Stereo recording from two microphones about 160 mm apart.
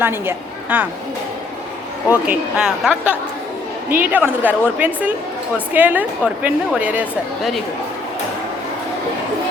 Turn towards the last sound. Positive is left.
turn(degrees=-5)  # may be behind; listen again after turning